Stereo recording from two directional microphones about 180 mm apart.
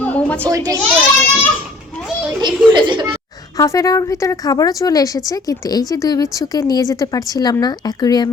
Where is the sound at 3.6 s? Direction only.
20° left (ahead or behind).